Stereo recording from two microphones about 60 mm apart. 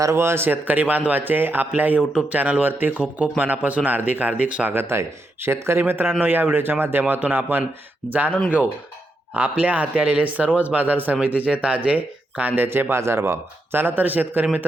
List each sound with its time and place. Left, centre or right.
0.0 s speech: right
4.7 s speech: right
9.3 s speech: right
12.6 s speech: right